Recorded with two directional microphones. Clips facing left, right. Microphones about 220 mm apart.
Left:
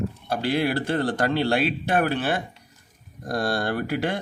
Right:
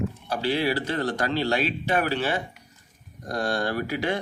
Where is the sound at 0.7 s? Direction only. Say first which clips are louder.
Left 2 dB; 50° left (ahead or behind).